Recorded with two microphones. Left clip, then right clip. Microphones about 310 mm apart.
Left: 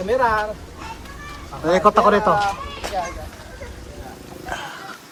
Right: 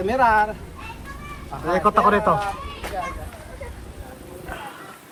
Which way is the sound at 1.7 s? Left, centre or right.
Centre.